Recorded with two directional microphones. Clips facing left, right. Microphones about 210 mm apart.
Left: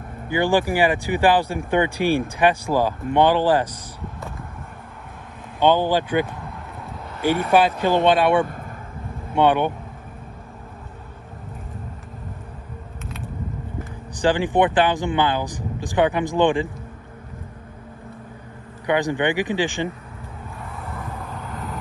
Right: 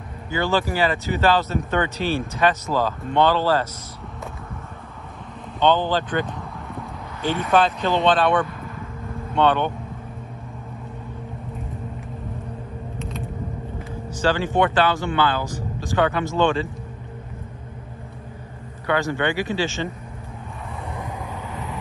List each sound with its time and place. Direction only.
0.3 s speech: 15° left (ahead or behind)
5.6 s speech: 10° left (ahead or behind)
8.5 s vehicle: 50° left (ahead or behind)
9.3 s speech: 15° left (ahead or behind)
14.1 s speech: 15° left (ahead or behind)
18.9 s speech: 15° left (ahead or behind)
21.3 s vehicle: centre (ahead or behind)